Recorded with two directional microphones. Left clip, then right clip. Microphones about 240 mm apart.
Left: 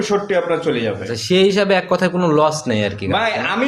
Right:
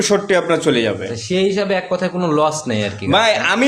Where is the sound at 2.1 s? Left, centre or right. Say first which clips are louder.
Right 1 dB; centre.